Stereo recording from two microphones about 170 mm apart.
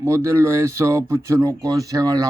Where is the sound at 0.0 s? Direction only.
15° right (ahead or behind).